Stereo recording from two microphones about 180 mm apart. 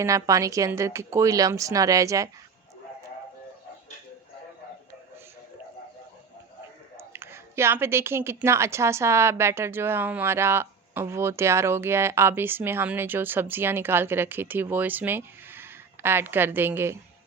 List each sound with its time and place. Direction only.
0.0 s speech: 20° right (ahead or behind)
6.9 s speech: 15° right (ahead or behind)